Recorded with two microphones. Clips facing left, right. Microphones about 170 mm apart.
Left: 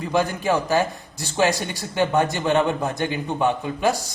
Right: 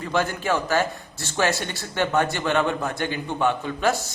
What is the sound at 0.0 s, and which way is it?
A man's voice, 15° left (ahead or behind).